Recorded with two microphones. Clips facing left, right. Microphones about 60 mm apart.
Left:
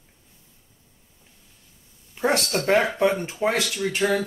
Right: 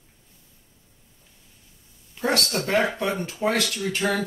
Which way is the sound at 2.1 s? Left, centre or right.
Left.